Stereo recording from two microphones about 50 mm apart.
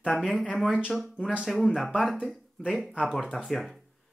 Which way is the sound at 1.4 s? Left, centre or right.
Centre.